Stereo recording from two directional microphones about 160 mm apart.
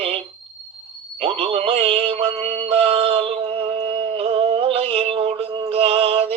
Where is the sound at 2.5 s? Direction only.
40° right (ahead or behind).